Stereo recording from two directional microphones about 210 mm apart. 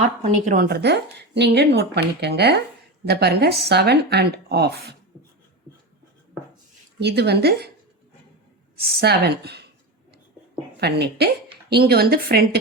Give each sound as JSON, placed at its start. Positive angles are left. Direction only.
{"t": 0.2, "sound": "speech", "side_deg": -40}
{"t": 7.0, "sound": "speech", "side_deg": -50}
{"t": 8.8, "sound": "speech", "side_deg": -50}
{"t": 10.8, "sound": "speech", "side_deg": -50}